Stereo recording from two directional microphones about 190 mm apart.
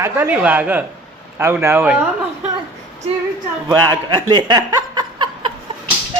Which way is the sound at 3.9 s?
20° right (ahead or behind).